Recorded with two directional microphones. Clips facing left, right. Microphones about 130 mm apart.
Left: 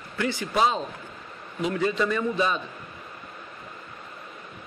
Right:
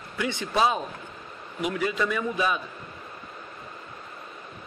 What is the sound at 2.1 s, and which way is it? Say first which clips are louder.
Speech: left 2 dB; 10° right (ahead or behind).